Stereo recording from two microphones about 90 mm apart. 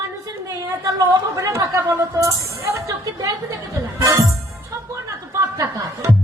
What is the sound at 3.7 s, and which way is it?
Music, 35° right (ahead or behind).